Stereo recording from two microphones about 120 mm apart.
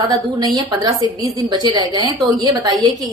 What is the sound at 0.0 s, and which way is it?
A woman's voice, 35° right (ahead or behind).